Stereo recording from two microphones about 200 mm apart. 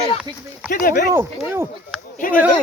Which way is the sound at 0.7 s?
45° left (ahead or behind).